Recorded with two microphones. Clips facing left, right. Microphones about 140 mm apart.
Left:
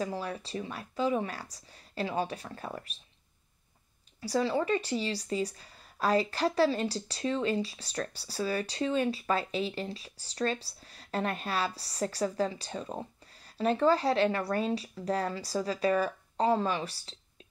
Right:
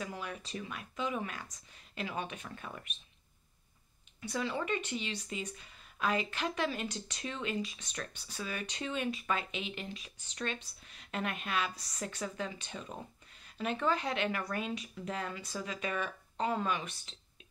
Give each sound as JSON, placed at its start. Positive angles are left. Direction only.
{"t": 0.0, "sound": "speech", "side_deg": 30}
{"t": 4.2, "sound": "speech", "side_deg": 35}